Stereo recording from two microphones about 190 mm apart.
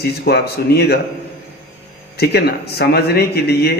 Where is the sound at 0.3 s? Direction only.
60° left (ahead or behind).